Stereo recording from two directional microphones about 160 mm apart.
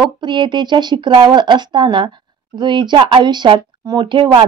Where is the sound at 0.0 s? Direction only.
30° right (ahead or behind).